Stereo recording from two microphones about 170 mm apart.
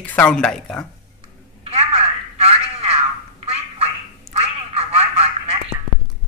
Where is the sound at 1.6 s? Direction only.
35° right (ahead or behind).